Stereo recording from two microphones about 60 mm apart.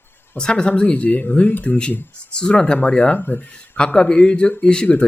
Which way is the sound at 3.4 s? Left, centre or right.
Centre.